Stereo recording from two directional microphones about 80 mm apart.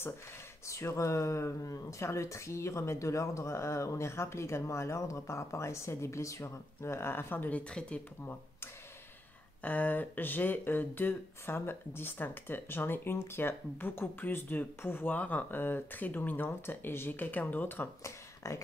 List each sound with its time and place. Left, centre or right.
0.7 s speech: left; by 8.4 s centre
9.6 s speech: left
18.0 s speech: left